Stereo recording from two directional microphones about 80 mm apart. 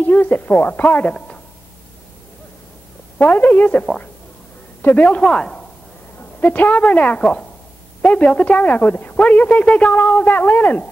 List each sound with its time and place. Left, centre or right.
0.0 s a woman's voice: left
1.1 s a sound: centre
3.2 s a woman's voice: centre
6.1 s a woman's voice: left